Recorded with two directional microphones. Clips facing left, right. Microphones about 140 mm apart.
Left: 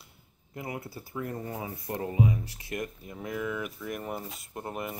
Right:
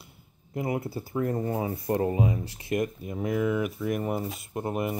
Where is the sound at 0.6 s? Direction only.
20° right (ahead or behind).